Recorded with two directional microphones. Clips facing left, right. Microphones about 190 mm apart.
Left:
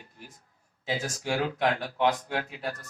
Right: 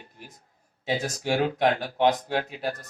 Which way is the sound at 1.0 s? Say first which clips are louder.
Right 4 dB; 35° right (ahead or behind).